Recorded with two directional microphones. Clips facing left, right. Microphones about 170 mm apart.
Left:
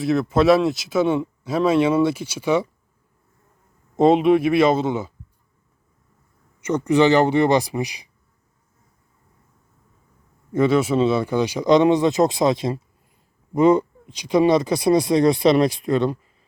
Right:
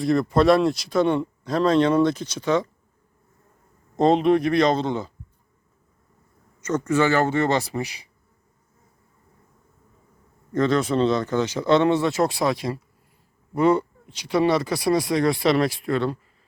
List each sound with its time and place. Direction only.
0.0 s speech: centre (ahead or behind)
3.9 s speech: 5° left (ahead or behind)
6.7 s speech: 15° left (ahead or behind)
10.5 s speech: 10° left (ahead or behind)